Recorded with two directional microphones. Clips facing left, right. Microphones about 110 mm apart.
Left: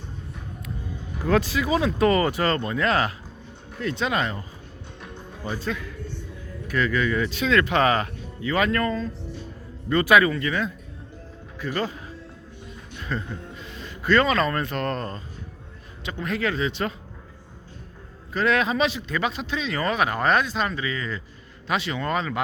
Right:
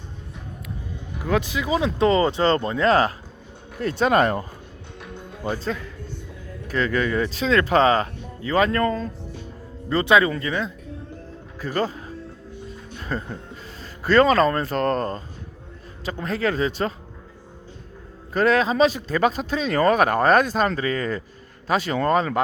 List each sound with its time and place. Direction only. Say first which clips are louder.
1.2 s speech: left 1 dB; 15° right (ahead or behind); by 4.4 s 45° right (ahead or behind)
5.5 s speech: right 3 dB; 35° right (ahead or behind)
13.0 s music: right 2 dB; 40° right (ahead or behind)
13.7 s speech: even; 35° right (ahead or behind)
18.3 s speech: right 4 dB; 35° right (ahead or behind)